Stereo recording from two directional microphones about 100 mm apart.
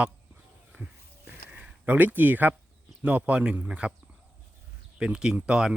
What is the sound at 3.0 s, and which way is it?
Speech, 15° right (ahead or behind).